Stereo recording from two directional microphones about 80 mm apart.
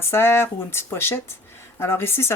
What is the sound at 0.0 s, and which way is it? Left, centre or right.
Speech, left.